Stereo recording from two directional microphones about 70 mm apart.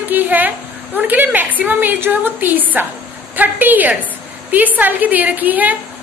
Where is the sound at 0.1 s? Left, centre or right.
Right.